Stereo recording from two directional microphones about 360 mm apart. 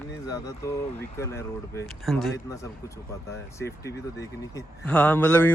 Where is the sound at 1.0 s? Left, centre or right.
Centre.